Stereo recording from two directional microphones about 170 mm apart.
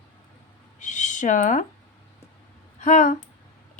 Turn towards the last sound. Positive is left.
turn(degrees=45)  # may be behind; listen again after turning